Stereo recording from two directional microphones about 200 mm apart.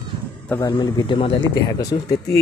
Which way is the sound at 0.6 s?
20° left (ahead or behind).